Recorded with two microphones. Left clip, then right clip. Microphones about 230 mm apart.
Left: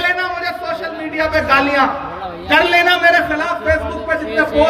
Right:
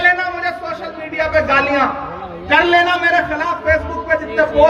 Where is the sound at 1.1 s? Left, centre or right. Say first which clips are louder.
Even; left.